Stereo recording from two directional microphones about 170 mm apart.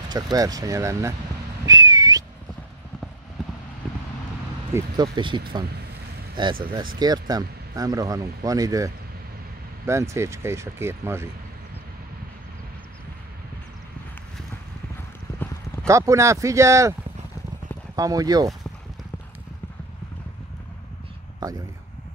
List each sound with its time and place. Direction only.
0.1 s speech: 20° right (ahead or behind)
1.7 s whistling: 20° right (ahead or behind)
4.7 s speech: 25° right (ahead or behind)
15.3 s clip-clop: 10° left (ahead or behind)
15.9 s speech: 15° right (ahead or behind)
17.9 s speech: 20° right (ahead or behind)